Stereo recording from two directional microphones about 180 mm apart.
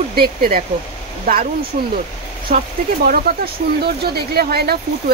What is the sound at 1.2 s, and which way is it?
Speech, 50° right (ahead or behind).